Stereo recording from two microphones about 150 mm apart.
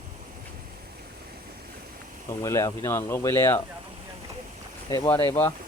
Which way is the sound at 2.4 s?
20° left (ahead or behind).